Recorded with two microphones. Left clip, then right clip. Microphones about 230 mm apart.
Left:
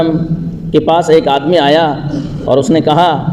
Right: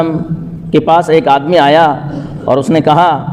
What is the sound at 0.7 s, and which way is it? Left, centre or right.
A man's voice, right.